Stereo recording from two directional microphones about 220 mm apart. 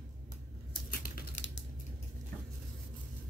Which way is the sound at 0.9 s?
50° left (ahead or behind).